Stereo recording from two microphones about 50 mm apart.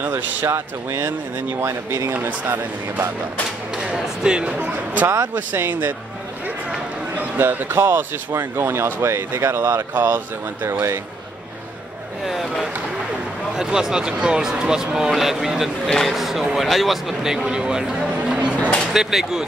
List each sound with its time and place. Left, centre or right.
0.0 s speech: right
0.5 s speech: right
2.1 s speech: right
3.7 s speech: centre
5.3 s speech: right
7.2 s a sound: right
7.7 s speech: right
10.1 s speech: right
12.3 s speech: centre
13.6 s speech: centre
15.9 s speech: centre
16.2 s speech: centre; by 18.7 s right
18.9 s speech: centre